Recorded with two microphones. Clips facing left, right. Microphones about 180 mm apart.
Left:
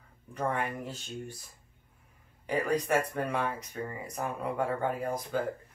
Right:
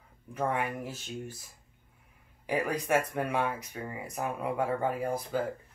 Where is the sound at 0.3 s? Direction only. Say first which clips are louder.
Right 1 dB; 10° right (ahead or behind).